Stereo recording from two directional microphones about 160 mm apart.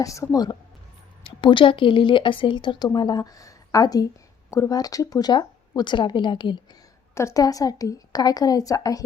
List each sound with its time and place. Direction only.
0.0 s speech: 20° left (ahead or behind)
1.2 s speech: 30° left (ahead or behind)
7.1 s speech: 15° left (ahead or behind)